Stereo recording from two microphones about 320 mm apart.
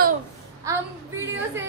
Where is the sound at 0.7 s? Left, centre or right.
Centre.